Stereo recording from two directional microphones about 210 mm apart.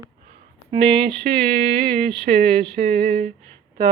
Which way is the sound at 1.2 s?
25° right (ahead or behind).